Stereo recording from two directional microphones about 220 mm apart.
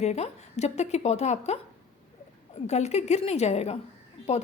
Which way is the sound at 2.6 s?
30° left (ahead or behind).